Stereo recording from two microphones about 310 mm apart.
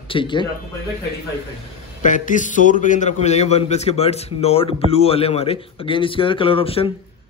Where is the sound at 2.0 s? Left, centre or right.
Left.